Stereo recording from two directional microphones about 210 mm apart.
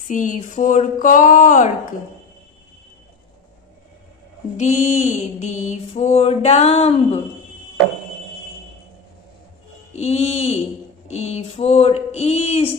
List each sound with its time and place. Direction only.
0.1 s mantra: 40° left (ahead or behind)
4.6 s mantra: 30° left (ahead or behind)
9.9 s mantra: 30° left (ahead or behind)